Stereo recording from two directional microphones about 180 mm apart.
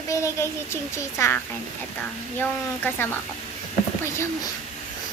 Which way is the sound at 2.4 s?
10° left (ahead or behind).